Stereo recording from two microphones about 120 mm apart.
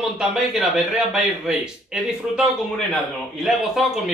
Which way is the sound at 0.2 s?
5° right (ahead or behind).